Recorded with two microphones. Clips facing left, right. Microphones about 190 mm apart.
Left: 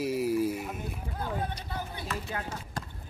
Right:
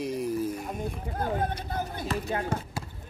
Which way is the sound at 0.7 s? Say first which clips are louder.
Right 4 dB; 45° right (ahead or behind).